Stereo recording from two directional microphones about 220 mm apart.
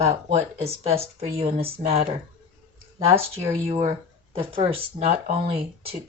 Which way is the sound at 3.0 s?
25° right (ahead or behind).